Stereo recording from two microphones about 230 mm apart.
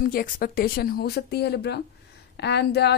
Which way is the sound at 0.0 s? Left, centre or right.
Left.